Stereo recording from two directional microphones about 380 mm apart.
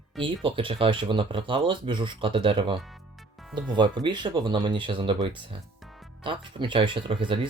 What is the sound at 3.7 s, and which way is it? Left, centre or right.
Speech, centre.